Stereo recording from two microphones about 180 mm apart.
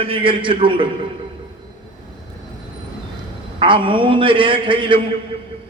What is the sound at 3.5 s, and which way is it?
A man's voice, 30° right (ahead or behind).